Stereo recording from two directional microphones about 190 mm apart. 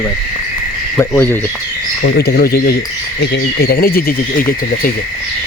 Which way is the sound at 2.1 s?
55° left (ahead or behind).